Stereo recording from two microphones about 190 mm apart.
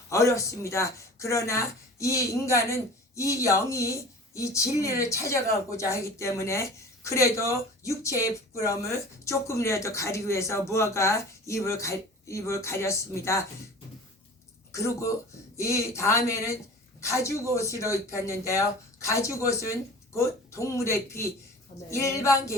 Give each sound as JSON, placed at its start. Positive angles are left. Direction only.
{"t": 0.1, "sound": "speech", "side_deg": 15}
{"t": 14.7, "sound": "speech", "side_deg": 15}